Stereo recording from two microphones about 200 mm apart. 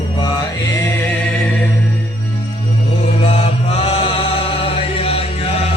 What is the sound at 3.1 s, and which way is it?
Chant, 30° left (ahead or behind).